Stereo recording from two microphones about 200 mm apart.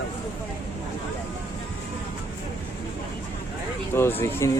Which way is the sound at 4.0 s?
10° left (ahead or behind).